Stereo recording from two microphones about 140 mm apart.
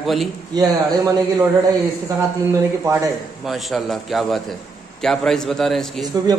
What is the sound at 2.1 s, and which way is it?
Speech, 25° right (ahead or behind).